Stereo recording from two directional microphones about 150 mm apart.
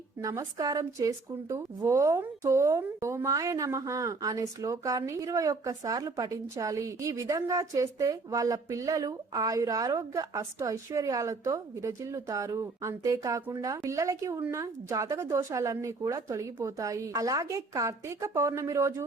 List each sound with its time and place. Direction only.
0.2 s a woman's voice: 25° right (ahead or behind)